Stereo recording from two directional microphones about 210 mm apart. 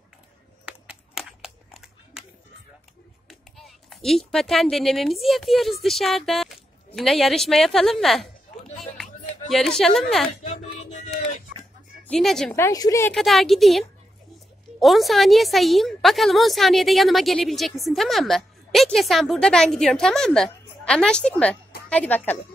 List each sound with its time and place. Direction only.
0.7 s a sound: 5° right (ahead or behind)
3.3 s a woman's voice: centre (ahead or behind)
8.9 s music: centre (ahead or behind)
10.4 s a sound: 30° left (ahead or behind)
12.1 s a woman's voice: centre (ahead or behind)
12.5 s a woman's voice: 15° left (ahead or behind)
13.1 s a woman's voice: centre (ahead or behind)